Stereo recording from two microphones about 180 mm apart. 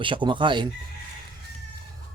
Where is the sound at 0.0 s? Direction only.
25° right (ahead or behind).